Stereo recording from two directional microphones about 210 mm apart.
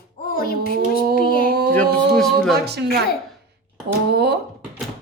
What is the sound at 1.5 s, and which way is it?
Speech, 45° right (ahead or behind).